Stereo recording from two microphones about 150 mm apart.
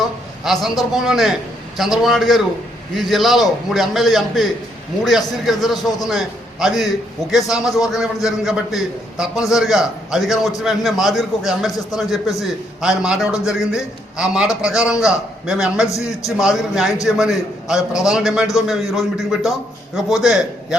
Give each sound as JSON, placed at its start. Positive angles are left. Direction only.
{"t": 0.0, "sound": "a man's voice", "side_deg": 0}
{"t": 15.9, "sound": "a man's voice", "side_deg": 20}
{"t": 16.4, "sound": "a man's voice", "side_deg": -5}